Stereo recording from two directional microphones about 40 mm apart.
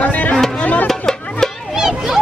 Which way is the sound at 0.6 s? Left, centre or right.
Left.